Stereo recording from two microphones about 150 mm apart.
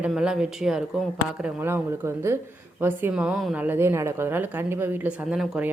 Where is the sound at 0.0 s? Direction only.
5° right (ahead or behind).